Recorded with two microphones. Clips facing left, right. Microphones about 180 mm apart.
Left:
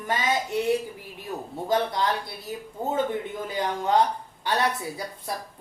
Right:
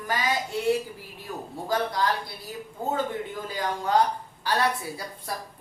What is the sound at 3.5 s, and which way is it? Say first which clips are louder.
A woman's voice: left 1 dB; 20° left (ahead or behind).